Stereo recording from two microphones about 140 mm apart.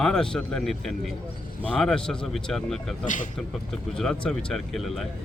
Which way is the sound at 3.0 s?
65° left (ahead or behind).